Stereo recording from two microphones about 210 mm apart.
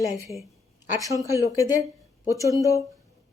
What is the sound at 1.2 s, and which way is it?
Speech, 15° right (ahead or behind).